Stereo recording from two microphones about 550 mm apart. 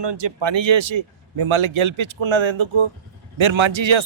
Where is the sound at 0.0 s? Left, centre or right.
Right.